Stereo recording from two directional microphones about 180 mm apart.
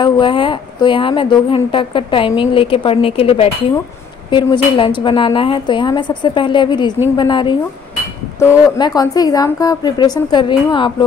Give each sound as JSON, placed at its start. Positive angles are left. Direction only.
{"t": 0.0, "sound": "speech", "side_deg": 30}